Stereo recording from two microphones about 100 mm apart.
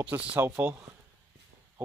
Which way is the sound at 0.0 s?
15° right (ahead or behind).